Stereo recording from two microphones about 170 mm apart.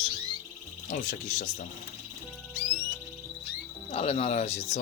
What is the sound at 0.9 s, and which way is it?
Speech, 50° left (ahead or behind).